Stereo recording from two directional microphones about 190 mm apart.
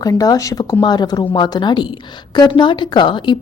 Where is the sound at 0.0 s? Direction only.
20° left (ahead or behind).